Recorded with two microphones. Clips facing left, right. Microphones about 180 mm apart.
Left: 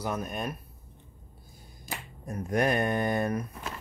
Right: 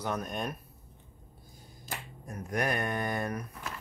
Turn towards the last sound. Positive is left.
turn(degrees=25)  # may be behind; listen again after turning